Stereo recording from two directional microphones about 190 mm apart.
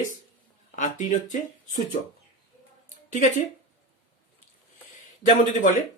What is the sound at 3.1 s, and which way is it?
Speech, 40° left (ahead or behind).